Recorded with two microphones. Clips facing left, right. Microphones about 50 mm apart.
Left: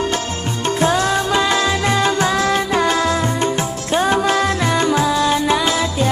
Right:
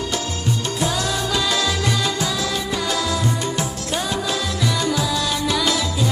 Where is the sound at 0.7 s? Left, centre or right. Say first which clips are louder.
Left 10 dB; left.